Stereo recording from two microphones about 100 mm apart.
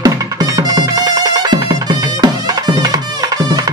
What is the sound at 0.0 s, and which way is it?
Music, 40° right (ahead or behind).